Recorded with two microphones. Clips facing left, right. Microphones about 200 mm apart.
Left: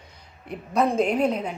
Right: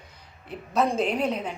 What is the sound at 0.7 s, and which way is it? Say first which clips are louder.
Speech: left 3 dB; 10° left (ahead or behind).